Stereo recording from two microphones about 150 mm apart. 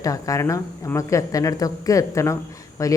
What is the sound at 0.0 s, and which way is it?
Speech, 20° left (ahead or behind).